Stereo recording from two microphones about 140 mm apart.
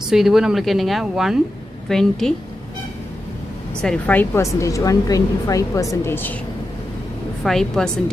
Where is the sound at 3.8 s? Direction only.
10° left (ahead or behind).